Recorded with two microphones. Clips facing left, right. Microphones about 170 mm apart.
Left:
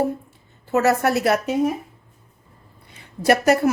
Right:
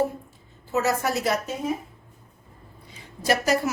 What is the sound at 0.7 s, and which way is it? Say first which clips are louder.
Speech: left 6 dB; 65° left (ahead or behind).